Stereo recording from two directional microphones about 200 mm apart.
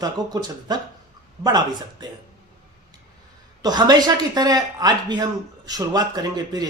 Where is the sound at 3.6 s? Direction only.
20° right (ahead or behind).